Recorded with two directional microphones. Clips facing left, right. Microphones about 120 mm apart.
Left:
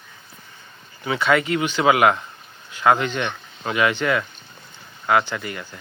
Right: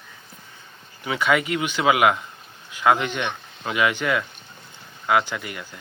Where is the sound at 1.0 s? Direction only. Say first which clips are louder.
Left 2 dB; 5° right (ahead or behind).